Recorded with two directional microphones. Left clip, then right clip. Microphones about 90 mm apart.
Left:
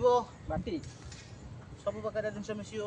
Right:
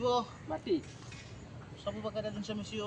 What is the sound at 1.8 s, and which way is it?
Speech, 50° left (ahead or behind).